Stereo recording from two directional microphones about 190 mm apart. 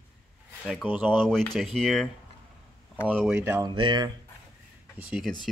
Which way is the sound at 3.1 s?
Centre (ahead or behind).